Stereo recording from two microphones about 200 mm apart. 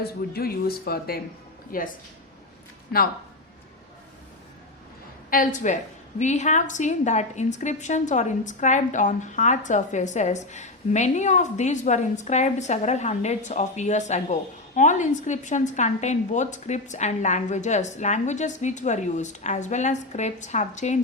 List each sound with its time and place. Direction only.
0.0 s speech: 50° left (ahead or behind)
5.3 s a woman's voice: 40° left (ahead or behind)